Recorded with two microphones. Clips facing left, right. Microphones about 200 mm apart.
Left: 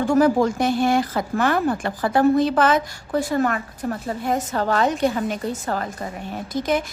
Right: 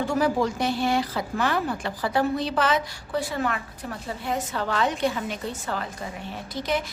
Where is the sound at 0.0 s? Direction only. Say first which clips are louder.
Left 6 dB; 50° left (ahead or behind).